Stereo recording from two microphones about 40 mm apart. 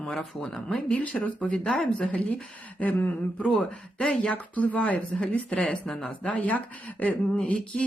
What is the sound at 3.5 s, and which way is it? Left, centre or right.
Speech, left.